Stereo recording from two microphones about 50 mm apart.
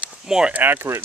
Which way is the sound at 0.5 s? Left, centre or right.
Right.